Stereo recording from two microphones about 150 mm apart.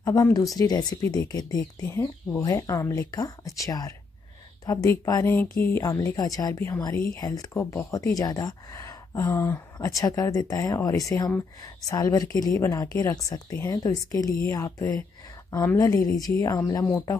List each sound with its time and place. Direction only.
0.0 s speech: 25° left (ahead or behind)